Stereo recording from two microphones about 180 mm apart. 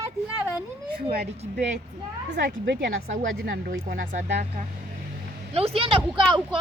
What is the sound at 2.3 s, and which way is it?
Speech, 90° right.